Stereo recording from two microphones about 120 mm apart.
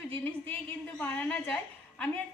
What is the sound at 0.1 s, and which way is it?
A woman's voice, 15° left (ahead or behind).